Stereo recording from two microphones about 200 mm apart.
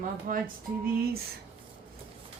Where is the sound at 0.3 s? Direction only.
45° right (ahead or behind).